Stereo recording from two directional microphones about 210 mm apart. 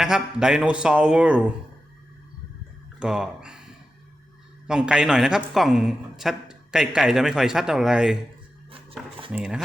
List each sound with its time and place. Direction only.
0.0 s a woman's voice: 5° right (ahead or behind)
3.0 s a woman's voice: 5° right (ahead or behind)
4.6 s a woman's voice: 5° right (ahead or behind)
8.7 s dishes: 25° right (ahead or behind)
9.3 s a woman's voice: 5° right (ahead or behind)